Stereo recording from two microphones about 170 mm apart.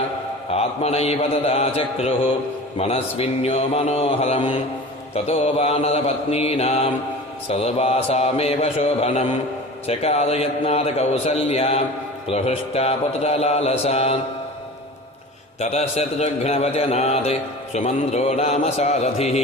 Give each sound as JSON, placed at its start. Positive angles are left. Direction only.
{"t": 0.5, "sound": "a man's voice", "side_deg": 40}
{"t": 15.6, "sound": "a man's voice", "side_deg": 40}